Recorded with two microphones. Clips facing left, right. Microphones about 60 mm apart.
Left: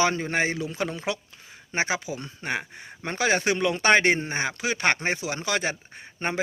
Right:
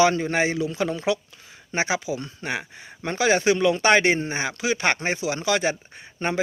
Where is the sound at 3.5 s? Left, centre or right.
Left.